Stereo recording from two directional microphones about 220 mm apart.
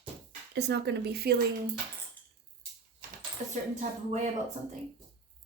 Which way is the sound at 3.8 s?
30° right (ahead or behind).